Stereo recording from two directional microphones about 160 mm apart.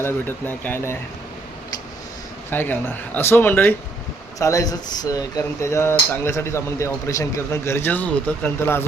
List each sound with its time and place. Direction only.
0.0 s speech: 10° left (ahead or behind)
2.5 s speech: 10° left (ahead or behind)